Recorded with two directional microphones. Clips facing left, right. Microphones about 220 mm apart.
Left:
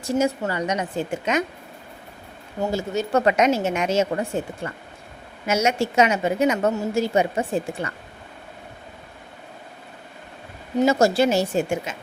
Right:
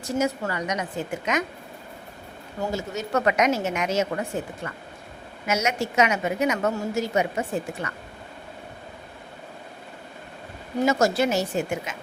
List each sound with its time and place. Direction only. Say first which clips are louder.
0.2 s a woman's voice: left 2 dB; 30° left (ahead or behind)
2.7 s a woman's voice: left 5 dB; 30° left (ahead or behind)
10.8 s a woman's voice: left 3 dB; 30° left (ahead or behind)